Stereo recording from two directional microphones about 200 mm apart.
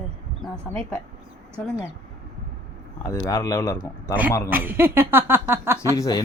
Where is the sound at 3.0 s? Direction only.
15° left (ahead or behind).